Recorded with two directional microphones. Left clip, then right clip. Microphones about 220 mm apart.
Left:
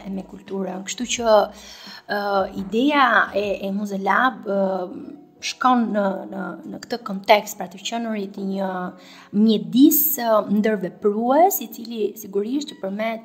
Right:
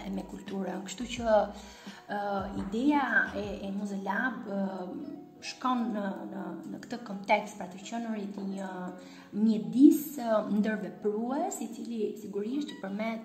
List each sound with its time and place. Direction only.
0.0 s a woman's voice: 20° left (ahead or behind)